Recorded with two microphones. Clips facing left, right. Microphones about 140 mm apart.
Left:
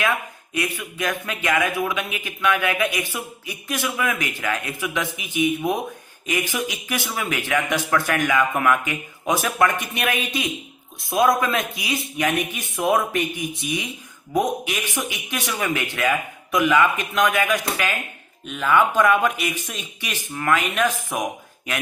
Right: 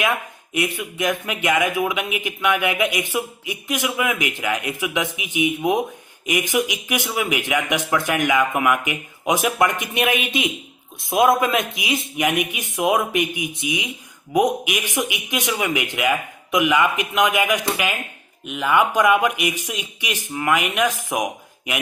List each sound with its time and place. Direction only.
0.5 s speech: 20° right (ahead or behind)